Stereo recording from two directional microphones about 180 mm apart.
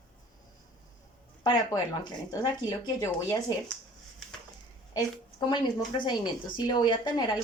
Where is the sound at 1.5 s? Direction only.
25° left (ahead or behind).